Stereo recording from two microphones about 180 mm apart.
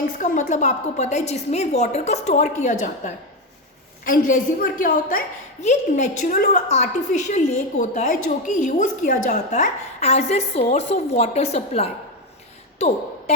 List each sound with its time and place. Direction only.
0.2 s a woman's voice: 45° left (ahead or behind)